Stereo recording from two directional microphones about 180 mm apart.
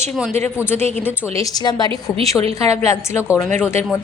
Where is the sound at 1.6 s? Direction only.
25° left (ahead or behind).